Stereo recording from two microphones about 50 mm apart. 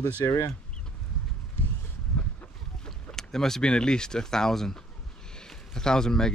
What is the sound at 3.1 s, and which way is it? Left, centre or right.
Speech, centre.